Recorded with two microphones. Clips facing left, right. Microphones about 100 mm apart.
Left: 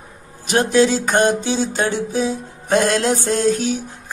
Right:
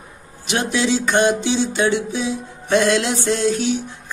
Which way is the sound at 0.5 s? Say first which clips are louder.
Left 5 dB; 40° left (ahead or behind).